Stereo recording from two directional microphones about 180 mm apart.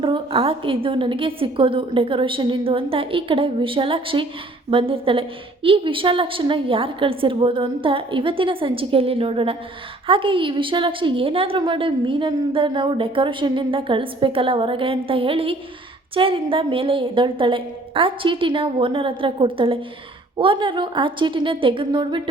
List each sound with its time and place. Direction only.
0.0 s a woman's voice: 30° right (ahead or behind)